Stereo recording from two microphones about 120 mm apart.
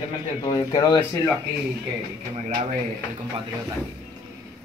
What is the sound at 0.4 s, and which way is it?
Speech, 35° left (ahead or behind).